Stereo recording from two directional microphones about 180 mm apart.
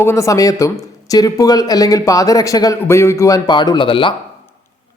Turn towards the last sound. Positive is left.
turn(degrees=25)  # may be behind; listen again after turning